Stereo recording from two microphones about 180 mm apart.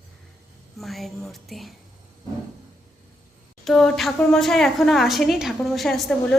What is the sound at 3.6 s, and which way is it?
A woman's voice, centre (ahead or behind).